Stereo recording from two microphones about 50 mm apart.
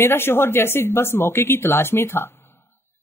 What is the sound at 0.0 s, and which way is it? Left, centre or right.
Speech, left.